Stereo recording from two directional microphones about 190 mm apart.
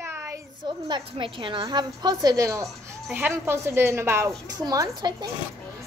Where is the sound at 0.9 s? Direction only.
25° right (ahead or behind).